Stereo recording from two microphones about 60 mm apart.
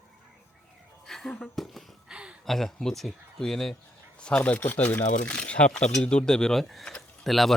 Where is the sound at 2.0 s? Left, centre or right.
Centre.